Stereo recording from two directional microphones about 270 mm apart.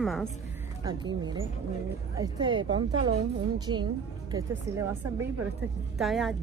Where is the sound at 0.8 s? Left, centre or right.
Centre.